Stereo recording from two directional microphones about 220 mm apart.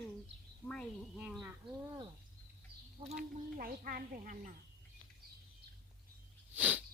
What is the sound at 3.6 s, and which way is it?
Speech, 40° right (ahead or behind).